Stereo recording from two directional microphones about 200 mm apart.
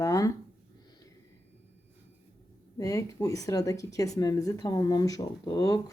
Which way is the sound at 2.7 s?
15° left (ahead or behind).